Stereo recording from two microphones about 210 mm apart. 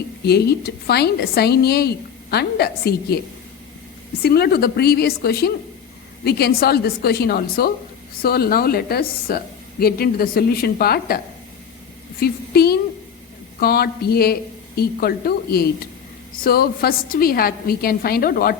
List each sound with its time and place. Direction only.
0.3 s a woman's voice: 50° left (ahead or behind)
4.2 s a woman's voice: 50° left (ahead or behind)
12.2 s a woman's voice: 50° left (ahead or behind)